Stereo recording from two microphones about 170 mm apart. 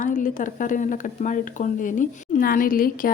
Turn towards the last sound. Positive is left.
turn(degrees=55)  # may be behind; listen again after turning